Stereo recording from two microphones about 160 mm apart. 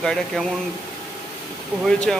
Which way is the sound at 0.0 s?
5° left (ahead or behind).